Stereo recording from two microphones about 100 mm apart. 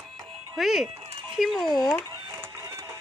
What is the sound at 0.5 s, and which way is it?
Speech, centre (ahead or behind).